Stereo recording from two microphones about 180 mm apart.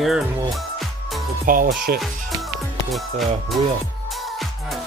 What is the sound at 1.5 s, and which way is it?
Speech, 50° right (ahead or behind).